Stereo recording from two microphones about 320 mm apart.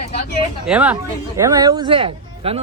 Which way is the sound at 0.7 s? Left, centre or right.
Centre.